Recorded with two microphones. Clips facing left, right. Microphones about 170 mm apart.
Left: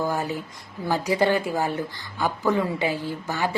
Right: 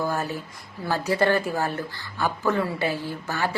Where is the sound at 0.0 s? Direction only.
15° left (ahead or behind).